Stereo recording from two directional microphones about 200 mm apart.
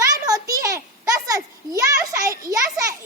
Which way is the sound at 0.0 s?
15° right (ahead or behind).